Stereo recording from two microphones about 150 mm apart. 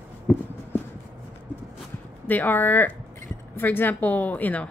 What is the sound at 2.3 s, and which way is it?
A woman's voice, 10° left (ahead or behind).